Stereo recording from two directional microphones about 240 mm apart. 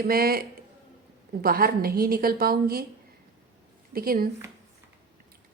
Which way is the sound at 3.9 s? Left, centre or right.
Right.